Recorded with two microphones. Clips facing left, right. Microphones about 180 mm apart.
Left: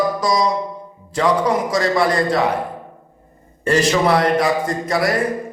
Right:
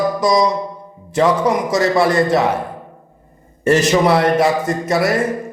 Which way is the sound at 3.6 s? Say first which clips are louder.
Right 3 dB; 20° right (ahead or behind).